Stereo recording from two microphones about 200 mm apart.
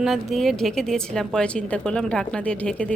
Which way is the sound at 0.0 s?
Centre (ahead or behind).